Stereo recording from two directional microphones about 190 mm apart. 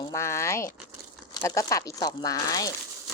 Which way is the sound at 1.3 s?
15° left (ahead or behind).